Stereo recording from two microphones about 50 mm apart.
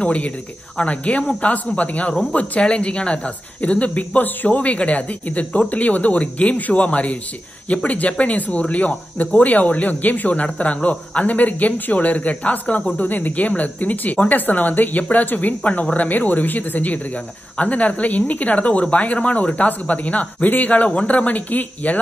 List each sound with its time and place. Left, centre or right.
0.0 s speech: left